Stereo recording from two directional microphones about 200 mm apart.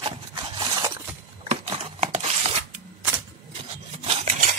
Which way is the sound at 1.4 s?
30° right (ahead or behind).